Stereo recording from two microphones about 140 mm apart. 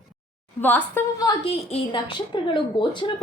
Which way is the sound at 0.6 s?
15° left (ahead or behind).